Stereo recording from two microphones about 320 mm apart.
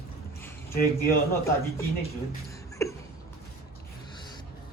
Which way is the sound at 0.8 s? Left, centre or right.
Left.